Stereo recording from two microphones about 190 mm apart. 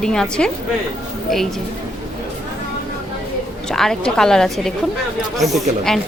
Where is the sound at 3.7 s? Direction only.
Centre (ahead or behind).